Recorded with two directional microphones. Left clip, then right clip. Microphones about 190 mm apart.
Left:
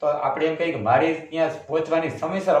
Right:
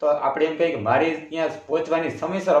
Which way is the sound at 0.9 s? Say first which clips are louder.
Left 1 dB; 50° right (ahead or behind).